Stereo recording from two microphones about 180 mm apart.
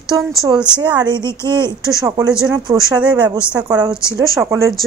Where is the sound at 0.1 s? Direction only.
20° right (ahead or behind).